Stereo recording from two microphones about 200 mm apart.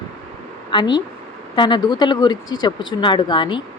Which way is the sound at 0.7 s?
25° left (ahead or behind).